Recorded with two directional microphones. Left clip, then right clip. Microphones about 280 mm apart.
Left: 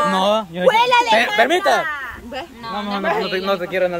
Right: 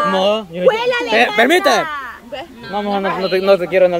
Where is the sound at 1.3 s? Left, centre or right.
Right.